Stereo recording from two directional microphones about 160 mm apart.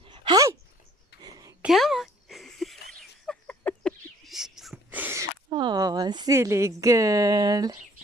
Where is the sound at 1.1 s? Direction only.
85° left.